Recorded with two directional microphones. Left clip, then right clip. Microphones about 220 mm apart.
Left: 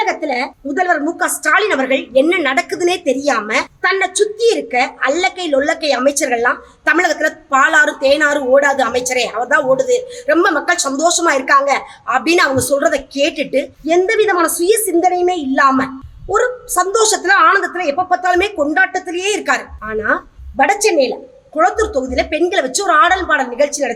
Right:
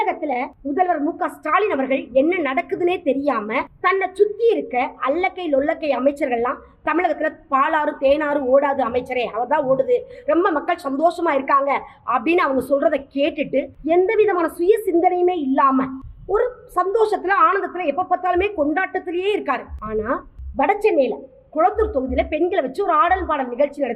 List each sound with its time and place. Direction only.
0.0 s a woman's voice: 20° left (ahead or behind)